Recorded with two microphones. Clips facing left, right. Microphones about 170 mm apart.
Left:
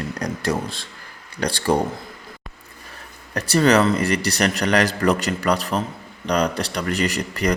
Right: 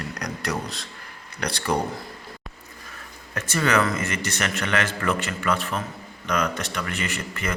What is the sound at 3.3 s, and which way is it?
A man's voice, 35° left (ahead or behind).